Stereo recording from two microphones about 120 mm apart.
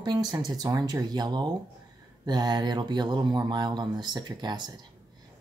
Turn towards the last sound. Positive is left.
turn(degrees=-35)  # may be behind; listen again after turning